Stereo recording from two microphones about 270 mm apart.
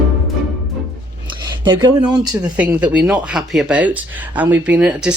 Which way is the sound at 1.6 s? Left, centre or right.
Centre.